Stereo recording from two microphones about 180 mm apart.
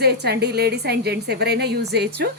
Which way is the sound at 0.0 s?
65° right (ahead or behind).